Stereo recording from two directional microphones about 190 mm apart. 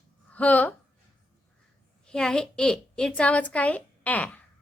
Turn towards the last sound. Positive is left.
turn(degrees=10)  # may be behind; listen again after turning